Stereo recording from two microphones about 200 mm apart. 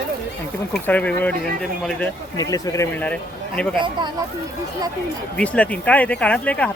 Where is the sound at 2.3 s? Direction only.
15° left (ahead or behind).